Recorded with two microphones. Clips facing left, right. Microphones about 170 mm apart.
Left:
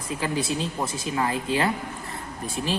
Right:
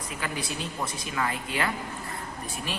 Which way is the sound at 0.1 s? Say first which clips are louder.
Left 8 dB; 25° left (ahead or behind).